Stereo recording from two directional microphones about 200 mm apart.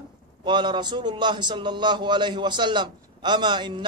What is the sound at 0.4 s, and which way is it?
A man's voice, 20° right (ahead or behind).